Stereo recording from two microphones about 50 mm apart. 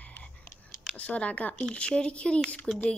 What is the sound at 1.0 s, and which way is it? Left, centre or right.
Speech, left.